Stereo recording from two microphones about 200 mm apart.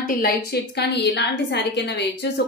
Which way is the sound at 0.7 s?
55° left (ahead or behind).